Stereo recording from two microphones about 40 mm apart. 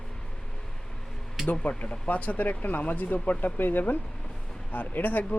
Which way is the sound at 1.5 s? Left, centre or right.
Left.